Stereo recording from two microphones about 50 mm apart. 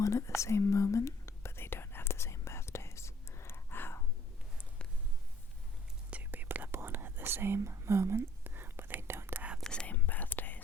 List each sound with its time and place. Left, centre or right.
0.0 s whispering: left
6.3 s whispering: right
6.7 s whispering: right
7.7 s speech: right
8.4 s whispering: right
9.8 s whispering: left